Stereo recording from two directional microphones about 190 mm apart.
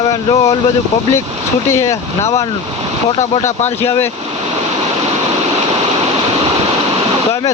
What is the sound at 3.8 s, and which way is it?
Speech, 15° left (ahead or behind).